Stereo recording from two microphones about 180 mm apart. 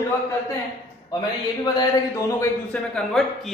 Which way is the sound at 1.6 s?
20° left (ahead or behind).